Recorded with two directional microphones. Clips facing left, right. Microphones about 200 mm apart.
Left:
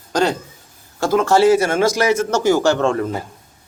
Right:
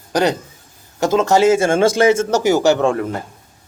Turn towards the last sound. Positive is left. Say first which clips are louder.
# even
turn(degrees=0)  # may be behind; listen again after turning